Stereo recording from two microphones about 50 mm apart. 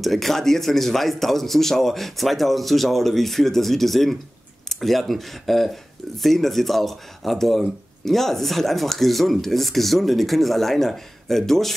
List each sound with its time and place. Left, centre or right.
0.0 s speech: centre